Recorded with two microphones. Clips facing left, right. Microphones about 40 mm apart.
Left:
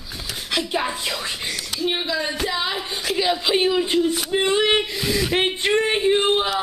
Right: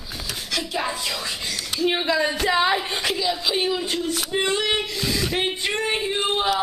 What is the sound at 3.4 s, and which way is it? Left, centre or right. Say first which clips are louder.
Speech: left 4 dB; left.